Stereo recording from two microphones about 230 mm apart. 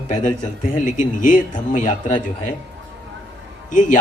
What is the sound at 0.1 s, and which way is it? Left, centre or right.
Speech, left.